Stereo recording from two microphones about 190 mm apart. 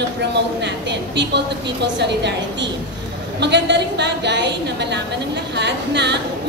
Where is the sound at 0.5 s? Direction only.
65° right (ahead or behind).